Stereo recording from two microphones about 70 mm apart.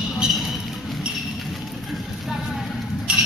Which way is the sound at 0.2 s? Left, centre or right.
Centre.